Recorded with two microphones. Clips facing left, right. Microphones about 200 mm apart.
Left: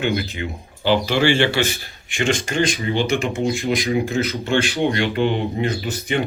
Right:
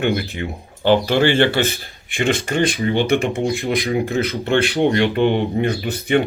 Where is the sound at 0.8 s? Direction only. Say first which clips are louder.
Right 3 dB; 50° right (ahead or behind).